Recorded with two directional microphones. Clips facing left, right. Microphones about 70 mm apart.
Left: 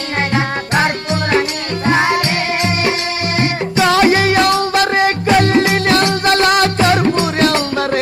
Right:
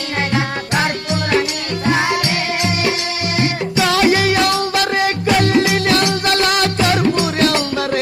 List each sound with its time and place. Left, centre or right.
0.3 s music: left
1.9 s music: left